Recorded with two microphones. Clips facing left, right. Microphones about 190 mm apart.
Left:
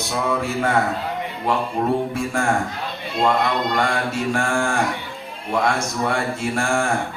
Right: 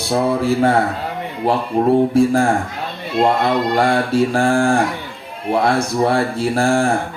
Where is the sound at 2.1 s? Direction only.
35° right (ahead or behind).